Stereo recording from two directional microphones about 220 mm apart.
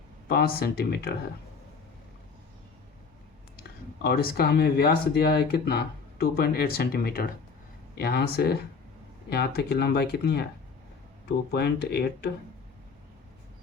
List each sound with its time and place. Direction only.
0.3 s speech: 40° left (ahead or behind)
3.6 s speech: 45° left (ahead or behind)
11.5 s speech: 45° left (ahead or behind)